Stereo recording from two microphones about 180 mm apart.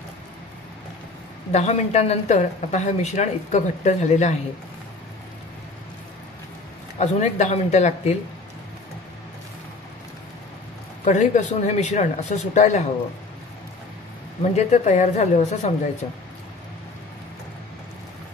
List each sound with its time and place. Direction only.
1.5 s speech: 40° left (ahead or behind)
7.0 s speech: 40° left (ahead or behind)
11.1 s speech: 40° left (ahead or behind)
14.4 s speech: 40° left (ahead or behind)